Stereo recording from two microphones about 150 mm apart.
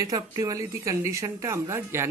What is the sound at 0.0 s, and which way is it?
Speech, 25° right (ahead or behind).